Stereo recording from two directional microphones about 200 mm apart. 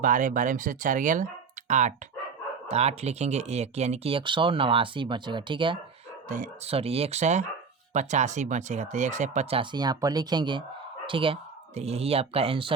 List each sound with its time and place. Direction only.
0.0 s speech: 40° right (ahead or behind); by 5.8 s 25° right (ahead or behind)
6.2 s speech: 40° right (ahead or behind)